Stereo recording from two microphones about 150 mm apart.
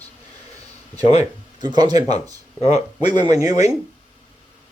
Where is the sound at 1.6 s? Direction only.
30° right (ahead or behind).